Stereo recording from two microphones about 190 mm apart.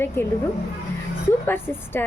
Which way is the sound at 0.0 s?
10° left (ahead or behind).